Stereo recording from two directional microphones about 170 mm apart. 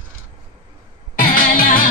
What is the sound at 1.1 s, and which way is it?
Music, 55° left (ahead or behind).